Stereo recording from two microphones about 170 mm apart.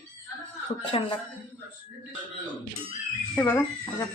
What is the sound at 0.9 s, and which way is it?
Dishes, 30° left (ahead or behind).